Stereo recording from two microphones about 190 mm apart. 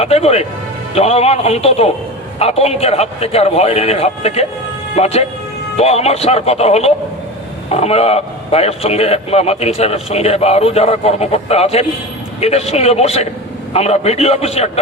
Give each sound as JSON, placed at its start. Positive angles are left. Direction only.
{"t": 0.0, "sound": "a man's voice", "side_deg": 35}